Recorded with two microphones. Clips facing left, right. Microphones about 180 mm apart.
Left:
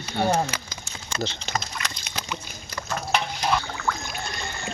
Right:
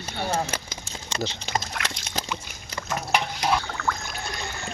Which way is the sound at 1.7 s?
75° right (ahead or behind).